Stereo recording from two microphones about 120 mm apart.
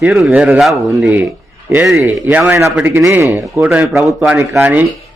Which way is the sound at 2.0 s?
20° right (ahead or behind).